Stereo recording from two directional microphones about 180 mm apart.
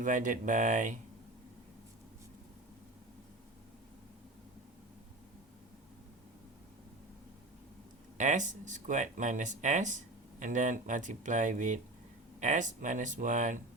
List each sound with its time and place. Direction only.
0.0 s speech: 45° right (ahead or behind)
8.2 s speech: 45° right (ahead or behind)